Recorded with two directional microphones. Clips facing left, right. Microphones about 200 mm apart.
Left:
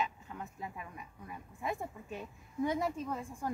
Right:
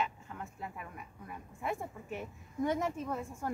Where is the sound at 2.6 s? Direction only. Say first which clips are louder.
Right 1 dB; 10° left (ahead or behind).